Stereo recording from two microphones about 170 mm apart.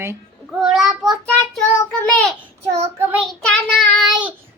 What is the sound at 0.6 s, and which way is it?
Child singing, centre (ahead or behind).